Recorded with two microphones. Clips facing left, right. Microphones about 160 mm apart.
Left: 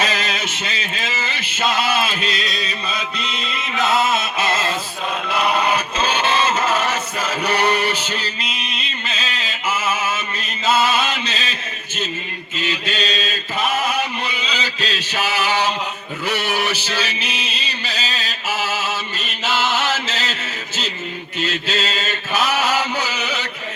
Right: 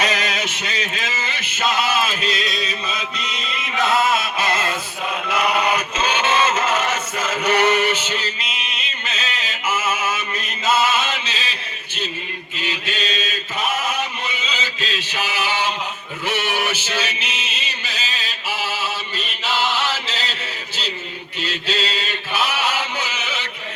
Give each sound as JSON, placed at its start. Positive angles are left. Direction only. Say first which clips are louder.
{"t": 0.2, "sound": "a sound", "louder": "even", "side_deg": 30}
{"t": 2.4, "sound": "music", "louder": "right 1 dB", "side_deg": 0}
{"t": 5.7, "sound": "chant", "louder": "left 1 dB", "side_deg": 35}
{"t": 10.7, "sound": "chant", "louder": "left 1 dB", "side_deg": 35}
{"t": 12.5, "sound": "mantra", "louder": "left 3 dB", "side_deg": 40}
{"t": 14.4, "sound": "mantra", "louder": "left 2 dB", "side_deg": 40}
{"t": 16.2, "sound": "a sound", "louder": "left 1 dB", "side_deg": 40}
{"t": 21.3, "sound": "chant", "louder": "left 2 dB", "side_deg": 45}